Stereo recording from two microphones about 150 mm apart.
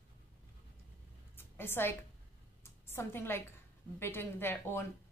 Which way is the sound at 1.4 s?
15° left (ahead or behind).